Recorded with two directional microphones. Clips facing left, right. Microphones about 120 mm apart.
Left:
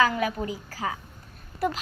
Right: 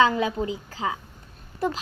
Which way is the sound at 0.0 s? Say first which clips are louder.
Right 3 dB; 25° right (ahead or behind).